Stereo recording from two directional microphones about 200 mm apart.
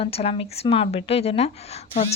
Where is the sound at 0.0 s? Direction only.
30° left (ahead or behind).